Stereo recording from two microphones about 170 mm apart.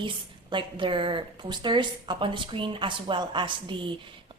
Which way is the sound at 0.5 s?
30° right (ahead or behind).